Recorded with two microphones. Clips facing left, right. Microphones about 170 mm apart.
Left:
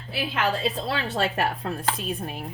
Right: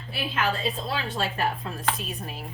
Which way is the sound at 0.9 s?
70° left (ahead or behind).